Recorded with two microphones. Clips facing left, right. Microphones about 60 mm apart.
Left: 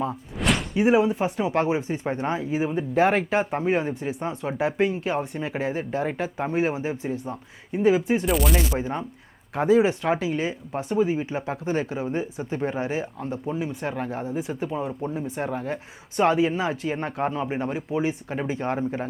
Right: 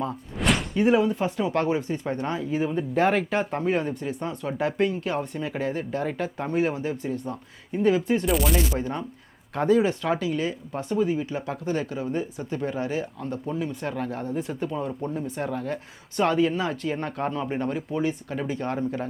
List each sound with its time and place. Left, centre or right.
0.3 s slam: centre
0.8 s speech: centre
8.3 s a sound: centre
8.5 s speech: centre
14.7 s speech: left